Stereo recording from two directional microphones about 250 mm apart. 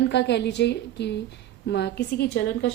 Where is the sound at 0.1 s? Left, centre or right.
Left.